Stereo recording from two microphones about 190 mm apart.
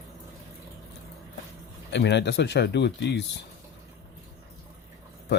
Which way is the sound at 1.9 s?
65° left (ahead or behind).